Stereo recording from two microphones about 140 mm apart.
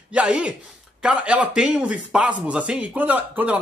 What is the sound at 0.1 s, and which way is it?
A man's voice, 10° right (ahead or behind).